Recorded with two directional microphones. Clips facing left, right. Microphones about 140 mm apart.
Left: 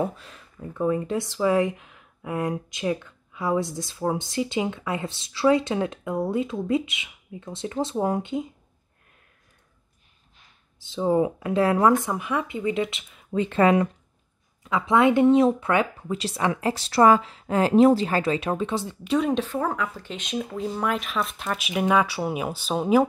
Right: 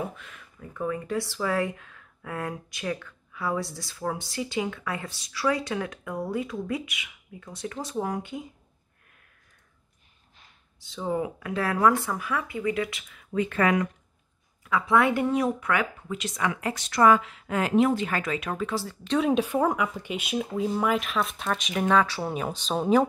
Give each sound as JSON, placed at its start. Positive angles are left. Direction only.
{"t": 0.1, "sound": "speech", "side_deg": 35}
{"t": 10.8, "sound": "speech", "side_deg": 25}
{"t": 19.0, "sound": "speech", "side_deg": 0}
{"t": 19.4, "sound": "speech", "side_deg": -15}